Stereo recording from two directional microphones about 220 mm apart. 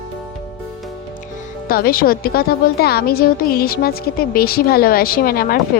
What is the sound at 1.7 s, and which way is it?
A woman's voice, 40° left (ahead or behind).